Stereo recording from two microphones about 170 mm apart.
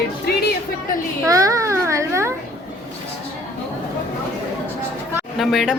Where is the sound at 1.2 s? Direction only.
20° right (ahead or behind).